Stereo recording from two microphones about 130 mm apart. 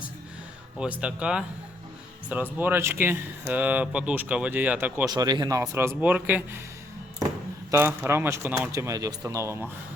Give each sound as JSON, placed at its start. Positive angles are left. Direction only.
{"t": 0.8, "sound": "speech", "side_deg": -10}
{"t": 5.0, "sound": "speech", "side_deg": -35}
{"t": 7.7, "sound": "speech", "side_deg": -20}